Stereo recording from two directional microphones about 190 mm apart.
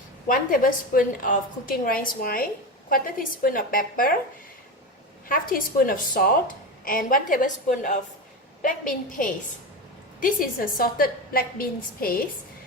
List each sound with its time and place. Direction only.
0.3 s a woman's voice: 45° left (ahead or behind)
5.3 s a woman's voice: 45° left (ahead or behind)